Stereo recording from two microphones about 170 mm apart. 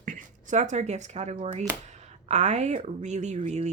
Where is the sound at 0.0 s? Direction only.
45° right (ahead or behind).